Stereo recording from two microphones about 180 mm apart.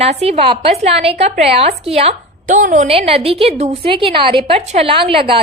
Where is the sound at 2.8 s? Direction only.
30° right (ahead or behind).